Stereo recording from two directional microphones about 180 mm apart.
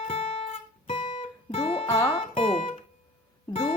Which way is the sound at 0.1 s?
35° left (ahead or behind).